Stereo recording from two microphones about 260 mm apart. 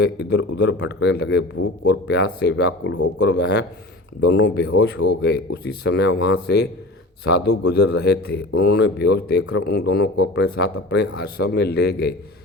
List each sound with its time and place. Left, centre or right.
0.0 s a man's voice: left
1.5 s a man's voice: left
1.9 s a man's voice: left